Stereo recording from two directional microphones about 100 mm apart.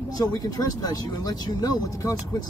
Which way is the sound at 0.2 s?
40° left (ahead or behind).